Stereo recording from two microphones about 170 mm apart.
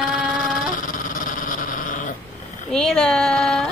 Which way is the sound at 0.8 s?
50° left (ahead or behind).